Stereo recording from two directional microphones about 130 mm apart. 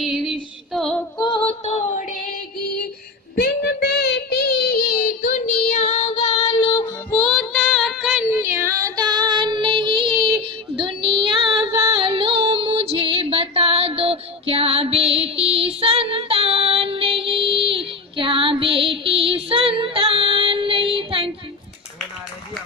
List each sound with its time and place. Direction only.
0.0 s female singing: centre (ahead or behind)
1.2 s music: 40° left (ahead or behind); by 2.3 s 75° left (ahead or behind)
4.9 s child singing: 70° left (ahead or behind); by 6.9 s 25° left (ahead or behind)
7.1 s child singing: 5° left (ahead or behind)
8.3 s child singing: 20° right (ahead or behind); by 11.7 s 40° right (ahead or behind)
11.8 s female singing: 45° right (ahead or behind)